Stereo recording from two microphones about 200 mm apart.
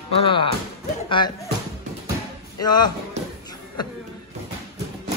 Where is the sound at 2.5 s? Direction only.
20° left (ahead or behind).